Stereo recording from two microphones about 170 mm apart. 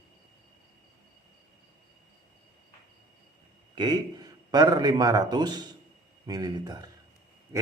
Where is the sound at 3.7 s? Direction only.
25° right (ahead or behind).